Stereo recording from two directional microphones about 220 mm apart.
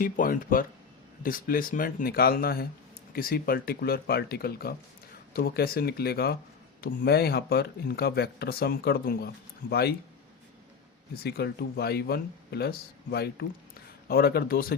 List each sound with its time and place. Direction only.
0.0 s speech: 40° left (ahead or behind)
11.2 s speech: 45° left (ahead or behind)